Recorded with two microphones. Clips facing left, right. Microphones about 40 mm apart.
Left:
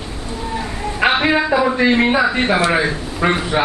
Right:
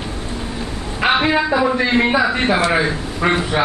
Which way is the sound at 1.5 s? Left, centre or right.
Centre.